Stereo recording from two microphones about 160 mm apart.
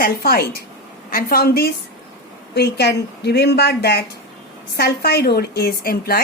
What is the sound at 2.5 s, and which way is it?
A woman's voice, 90° left.